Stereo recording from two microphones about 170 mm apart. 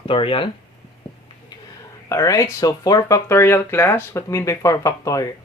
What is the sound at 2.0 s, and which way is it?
Speech, 20° left (ahead or behind).